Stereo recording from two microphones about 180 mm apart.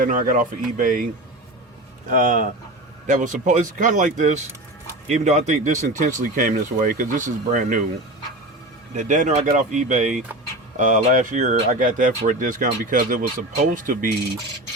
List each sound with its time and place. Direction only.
0.0 s speech: 50° right (ahead or behind)
2.0 s speech: 45° right (ahead or behind)
9.0 s speech: 45° right (ahead or behind)